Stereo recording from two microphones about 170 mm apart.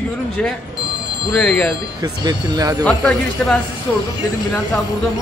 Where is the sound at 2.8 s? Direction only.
5° left (ahead or behind).